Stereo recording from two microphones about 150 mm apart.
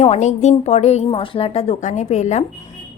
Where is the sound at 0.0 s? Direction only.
50° left (ahead or behind).